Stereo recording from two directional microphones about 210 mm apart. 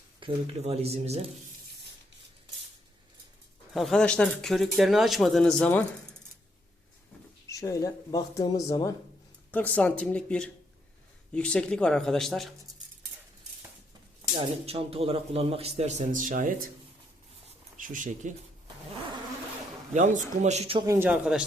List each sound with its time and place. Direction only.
0.2 s speech: 30° right (ahead or behind)
3.7 s speech: centre (ahead or behind)
7.4 s speech: 15° left (ahead or behind)
14.7 s speech: 30° right (ahead or behind)
17.7 s speech: 40° right (ahead or behind)
19.9 s speech: 35° right (ahead or behind)
20.8 s speech: 10° right (ahead or behind)